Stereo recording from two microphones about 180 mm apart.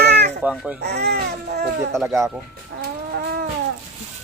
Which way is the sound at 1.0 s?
65° right (ahead or behind).